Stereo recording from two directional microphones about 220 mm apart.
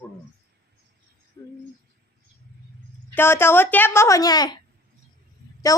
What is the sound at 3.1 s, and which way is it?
A woman's voice, 10° left (ahead or behind).